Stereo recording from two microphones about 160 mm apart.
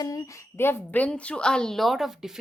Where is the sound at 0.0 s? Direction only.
20° left (ahead or behind).